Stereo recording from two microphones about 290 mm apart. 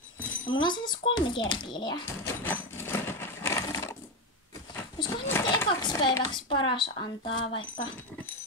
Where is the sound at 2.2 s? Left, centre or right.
Centre.